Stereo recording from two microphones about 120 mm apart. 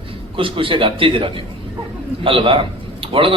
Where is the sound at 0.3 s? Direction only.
45° right (ahead or behind).